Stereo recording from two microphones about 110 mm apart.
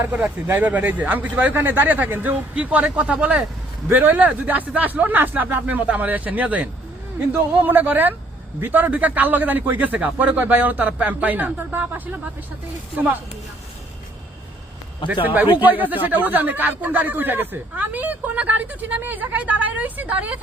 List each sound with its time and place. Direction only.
0.2 s speech: 20° right (ahead or behind)
15.2 s speech: 15° right (ahead or behind)